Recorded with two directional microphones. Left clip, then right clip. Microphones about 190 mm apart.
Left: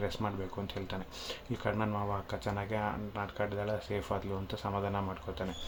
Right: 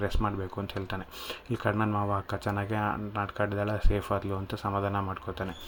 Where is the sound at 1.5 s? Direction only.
25° right (ahead or behind).